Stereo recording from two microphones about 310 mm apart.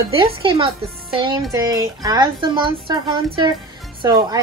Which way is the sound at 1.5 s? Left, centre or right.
Centre.